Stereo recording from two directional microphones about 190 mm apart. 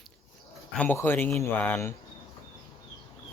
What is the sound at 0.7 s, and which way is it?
Speech, 10° left (ahead or behind).